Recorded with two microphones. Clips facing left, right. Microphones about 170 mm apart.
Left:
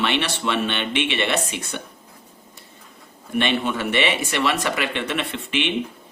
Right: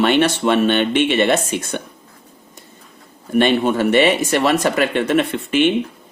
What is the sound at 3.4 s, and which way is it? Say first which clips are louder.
Speech: right 7 dB; 40° right (ahead or behind).